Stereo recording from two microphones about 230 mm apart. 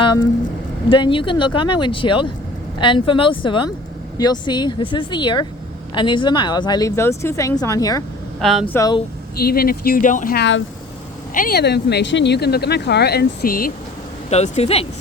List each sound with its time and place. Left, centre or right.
0.0 s vehicle: centre
0.9 s speech: left
8.4 s speech: centre
8.7 s speech: centre
9.4 s speech: left
14.3 s speech: left